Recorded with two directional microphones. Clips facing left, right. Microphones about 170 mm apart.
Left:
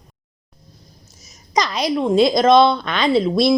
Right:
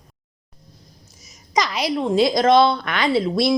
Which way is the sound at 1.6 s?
20° left (ahead or behind).